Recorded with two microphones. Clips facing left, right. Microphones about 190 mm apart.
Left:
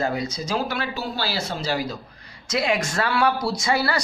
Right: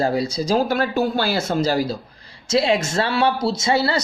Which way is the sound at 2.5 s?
25° right (ahead or behind).